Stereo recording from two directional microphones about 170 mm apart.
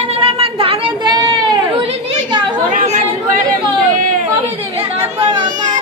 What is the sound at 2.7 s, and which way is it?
Chatter, 45° right (ahead or behind).